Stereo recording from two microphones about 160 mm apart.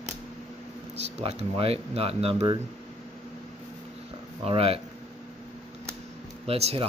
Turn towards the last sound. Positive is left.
turn(degrees=-40)  # may be behind; listen again after turning